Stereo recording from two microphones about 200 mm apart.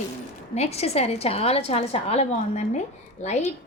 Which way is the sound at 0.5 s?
30° left (ahead or behind).